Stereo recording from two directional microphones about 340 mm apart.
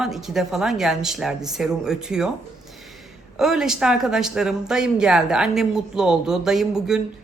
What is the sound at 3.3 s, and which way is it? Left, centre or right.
Speech, centre.